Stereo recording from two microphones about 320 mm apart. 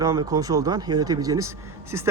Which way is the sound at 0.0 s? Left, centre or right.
Centre.